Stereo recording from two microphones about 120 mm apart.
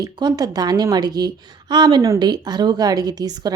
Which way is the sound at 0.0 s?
35° right (ahead or behind).